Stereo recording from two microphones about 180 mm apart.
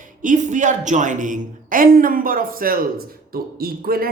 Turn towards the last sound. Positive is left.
turn(degrees=-55)  # may be behind; listen again after turning